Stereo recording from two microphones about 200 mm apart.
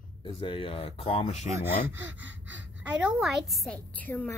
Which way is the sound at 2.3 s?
65° right (ahead or behind).